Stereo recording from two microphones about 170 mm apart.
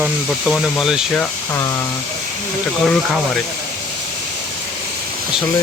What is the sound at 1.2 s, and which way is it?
Speech, 20° left (ahead or behind).